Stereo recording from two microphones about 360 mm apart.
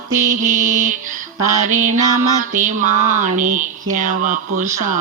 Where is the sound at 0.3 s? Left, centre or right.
Right.